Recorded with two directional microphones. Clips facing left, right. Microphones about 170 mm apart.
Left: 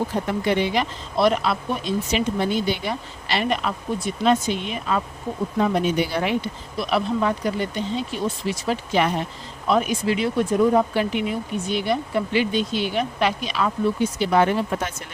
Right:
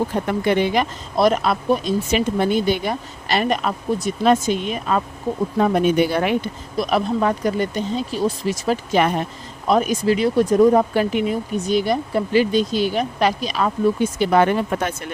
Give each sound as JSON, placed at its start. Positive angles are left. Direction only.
{"t": 0.3, "sound": "speech", "side_deg": -55}